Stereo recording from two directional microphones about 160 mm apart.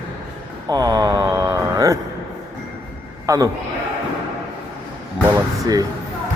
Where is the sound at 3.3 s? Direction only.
20° right (ahead or behind).